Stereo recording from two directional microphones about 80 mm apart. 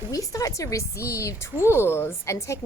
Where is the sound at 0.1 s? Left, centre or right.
Left.